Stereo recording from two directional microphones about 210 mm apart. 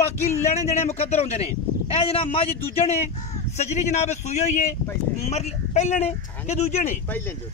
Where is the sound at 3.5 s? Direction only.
35° left (ahead or behind).